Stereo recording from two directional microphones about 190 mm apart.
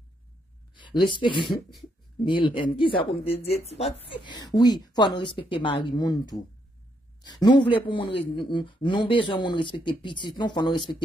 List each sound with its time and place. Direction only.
0.7 s a woman's voice: 25° left (ahead or behind)